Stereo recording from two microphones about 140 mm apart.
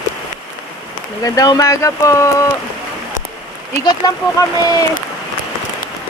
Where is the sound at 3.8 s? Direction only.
30° left (ahead or behind).